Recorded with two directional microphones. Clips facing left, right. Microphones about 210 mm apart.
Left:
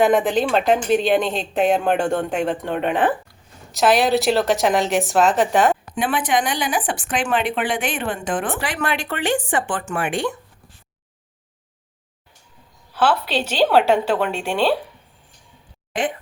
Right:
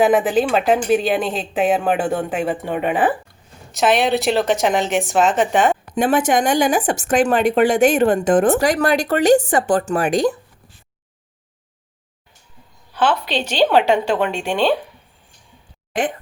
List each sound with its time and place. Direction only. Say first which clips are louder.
0.0 s speech: right 2 dB; 5° right (ahead or behind)
5.9 s speech: right 5 dB; 45° right (ahead or behind)
12.9 s speech: even; 5° left (ahead or behind)